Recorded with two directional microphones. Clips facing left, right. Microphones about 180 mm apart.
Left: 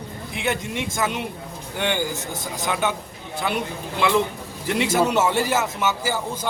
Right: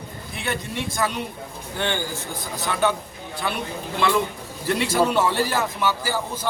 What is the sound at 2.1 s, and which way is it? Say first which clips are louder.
Speech: left 1 dB; 45° left (ahead or behind).